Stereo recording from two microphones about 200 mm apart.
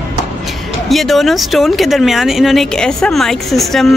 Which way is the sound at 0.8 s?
Centre (ahead or behind).